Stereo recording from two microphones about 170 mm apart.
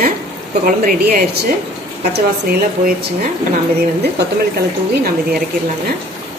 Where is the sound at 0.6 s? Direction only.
55° right (ahead or behind).